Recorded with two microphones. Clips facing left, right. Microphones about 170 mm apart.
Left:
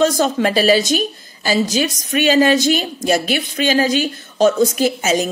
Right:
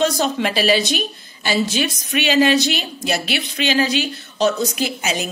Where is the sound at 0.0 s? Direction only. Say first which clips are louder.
Left 4 dB; 40° left (ahead or behind).